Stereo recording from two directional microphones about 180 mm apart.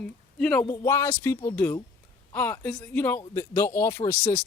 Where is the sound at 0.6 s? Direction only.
20° left (ahead or behind).